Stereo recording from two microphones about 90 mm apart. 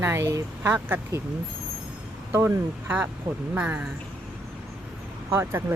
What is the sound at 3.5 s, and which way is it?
Speech, 15° right (ahead or behind).